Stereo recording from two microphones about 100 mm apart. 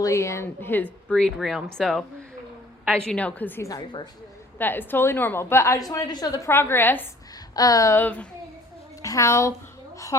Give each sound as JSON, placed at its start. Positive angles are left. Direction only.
{"t": 0.0, "sound": "a woman's voice", "side_deg": 30}
{"t": 1.0, "sound": "a woman's voice", "side_deg": 5}
{"t": 3.6, "sound": "a woman's voice", "side_deg": 40}
{"t": 4.5, "sound": "a woman's voice", "side_deg": 20}
{"t": 5.9, "sound": "a woman's voice", "side_deg": 40}
{"t": 6.5, "sound": "a woman's voice", "side_deg": 25}
{"t": 7.5, "sound": "a woman's voice", "side_deg": 35}
{"t": 7.9, "sound": "a woman's voice", "side_deg": 15}
{"t": 9.0, "sound": "a woman's voice", "side_deg": 35}